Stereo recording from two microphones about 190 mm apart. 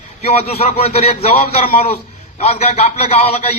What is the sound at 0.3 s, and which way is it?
A man's voice, 30° left (ahead or behind).